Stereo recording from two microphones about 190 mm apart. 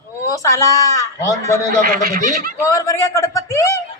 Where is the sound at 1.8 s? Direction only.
45° right (ahead or behind).